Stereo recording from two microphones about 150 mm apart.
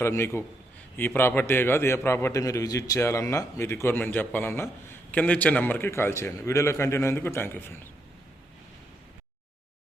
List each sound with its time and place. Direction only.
0.0 s a man's voice: 15° left (ahead or behind)